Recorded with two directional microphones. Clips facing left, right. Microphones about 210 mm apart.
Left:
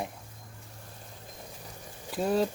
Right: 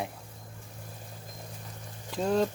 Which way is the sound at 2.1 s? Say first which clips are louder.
Even; 5° left (ahead or behind).